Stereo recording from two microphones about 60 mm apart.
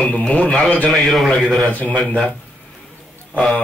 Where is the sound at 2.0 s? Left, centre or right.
Centre.